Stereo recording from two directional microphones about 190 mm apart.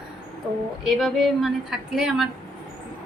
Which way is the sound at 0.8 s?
Centre (ahead or behind).